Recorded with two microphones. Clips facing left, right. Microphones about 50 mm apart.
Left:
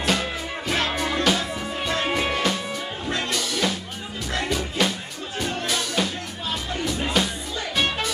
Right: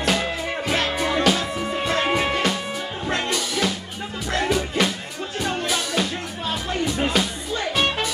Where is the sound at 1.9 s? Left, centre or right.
Right.